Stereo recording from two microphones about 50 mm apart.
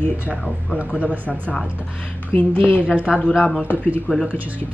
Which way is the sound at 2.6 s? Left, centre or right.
Left.